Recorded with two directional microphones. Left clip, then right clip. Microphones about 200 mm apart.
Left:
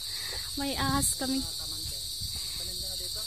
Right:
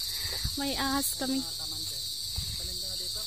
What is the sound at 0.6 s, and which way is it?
Speech, centre (ahead or behind).